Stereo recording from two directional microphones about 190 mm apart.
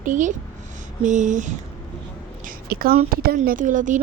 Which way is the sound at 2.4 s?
50° right (ahead or behind).